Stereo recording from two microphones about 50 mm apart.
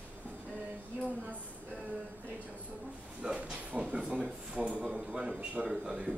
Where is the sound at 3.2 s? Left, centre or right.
Right.